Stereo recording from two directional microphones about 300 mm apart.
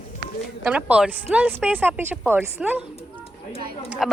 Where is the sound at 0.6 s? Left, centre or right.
Centre.